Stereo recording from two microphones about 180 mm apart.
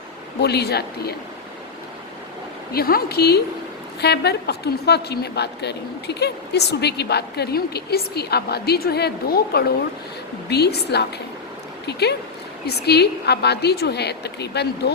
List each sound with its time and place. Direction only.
0.4 s a woman's voice: 65° left (ahead or behind)
2.7 s a woman's voice: 55° left (ahead or behind)